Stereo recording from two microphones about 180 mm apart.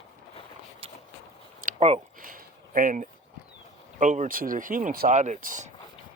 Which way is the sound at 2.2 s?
50° right (ahead or behind).